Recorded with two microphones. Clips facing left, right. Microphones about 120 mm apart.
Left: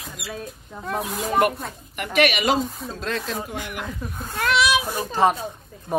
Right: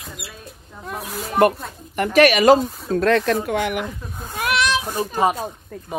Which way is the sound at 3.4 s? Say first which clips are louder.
Right 10 dB; 75° right (ahead or behind).